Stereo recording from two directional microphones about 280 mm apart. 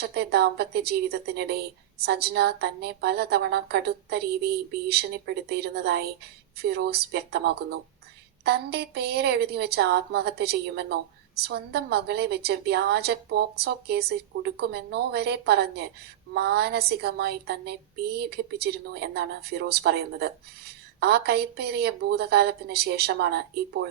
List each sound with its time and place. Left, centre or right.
0.0 s a woman's voice: right